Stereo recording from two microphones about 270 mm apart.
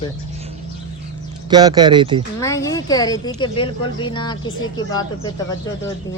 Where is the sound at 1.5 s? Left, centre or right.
Centre.